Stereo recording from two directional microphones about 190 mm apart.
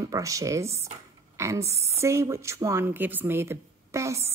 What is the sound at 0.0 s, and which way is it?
A woman's voice, 15° right (ahead or behind).